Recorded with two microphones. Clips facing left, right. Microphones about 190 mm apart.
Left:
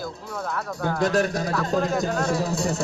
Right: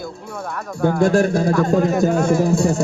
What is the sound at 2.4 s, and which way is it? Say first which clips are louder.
Speech: right 8 dB; 50° right (ahead or behind).